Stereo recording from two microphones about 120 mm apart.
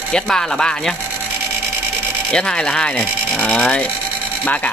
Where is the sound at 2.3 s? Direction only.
5° left (ahead or behind).